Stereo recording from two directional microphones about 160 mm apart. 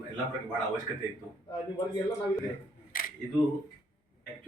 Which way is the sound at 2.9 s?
65° left (ahead or behind).